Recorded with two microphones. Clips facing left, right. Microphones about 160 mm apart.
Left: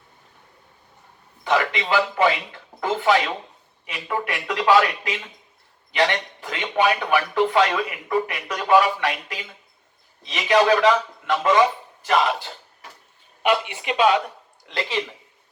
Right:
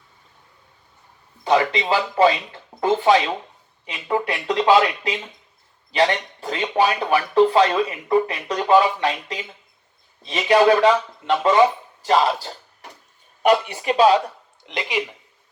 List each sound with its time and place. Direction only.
1.5 s speech: 25° right (ahead or behind)
5.9 s speech: 35° right (ahead or behind)
14.6 s speech: 20° right (ahead or behind)